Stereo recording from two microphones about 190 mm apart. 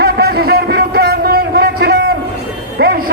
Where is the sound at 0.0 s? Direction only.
55° right (ahead or behind).